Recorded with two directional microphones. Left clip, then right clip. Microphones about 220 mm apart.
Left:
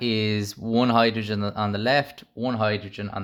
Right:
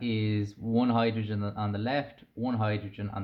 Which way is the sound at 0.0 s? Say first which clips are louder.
Left 7 dB; 45° left (ahead or behind).